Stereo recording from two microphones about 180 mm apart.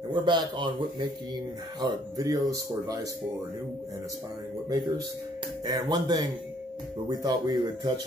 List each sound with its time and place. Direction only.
0.1 s speech: 25° right (ahead or behind)
5.7 s speech: 20° right (ahead or behind)